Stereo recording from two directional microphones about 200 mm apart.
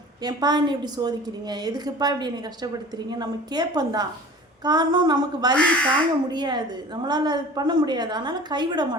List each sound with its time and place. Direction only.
0.2 s a woman's voice: 20° right (ahead or behind)
5.5 s speech: 5° left (ahead or behind)
6.3 s a woman's voice: 20° right (ahead or behind)